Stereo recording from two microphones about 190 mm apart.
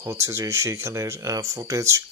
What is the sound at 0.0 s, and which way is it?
Speech, 15° right (ahead or behind).